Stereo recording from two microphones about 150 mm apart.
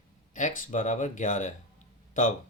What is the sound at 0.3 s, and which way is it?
Speech, 55° left (ahead or behind).